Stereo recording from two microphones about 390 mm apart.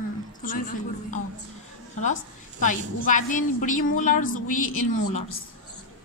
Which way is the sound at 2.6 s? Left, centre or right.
Centre.